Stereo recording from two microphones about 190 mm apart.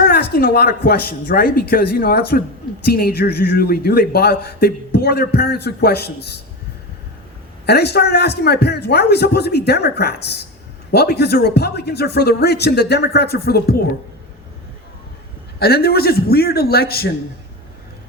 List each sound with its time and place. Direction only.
0.1 s a man's voice: 55° left (ahead or behind)
7.7 s a man's voice: 60° left (ahead or behind)
15.5 s a man's voice: 55° left (ahead or behind)